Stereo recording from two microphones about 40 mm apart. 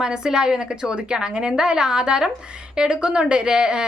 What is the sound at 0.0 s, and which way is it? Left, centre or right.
A woman's voice, centre.